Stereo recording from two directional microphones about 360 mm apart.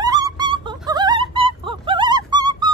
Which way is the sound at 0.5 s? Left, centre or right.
Centre.